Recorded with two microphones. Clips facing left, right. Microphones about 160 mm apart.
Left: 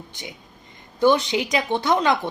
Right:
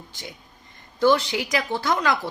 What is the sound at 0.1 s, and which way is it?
A woman's voice, 20° left (ahead or behind).